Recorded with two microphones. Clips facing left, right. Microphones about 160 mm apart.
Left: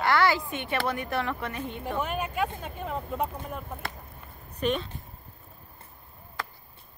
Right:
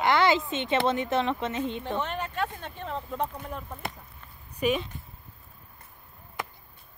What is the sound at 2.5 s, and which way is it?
Speech, 10° left (ahead or behind).